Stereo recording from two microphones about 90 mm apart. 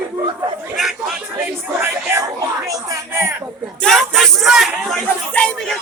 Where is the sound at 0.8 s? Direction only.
Centre (ahead or behind).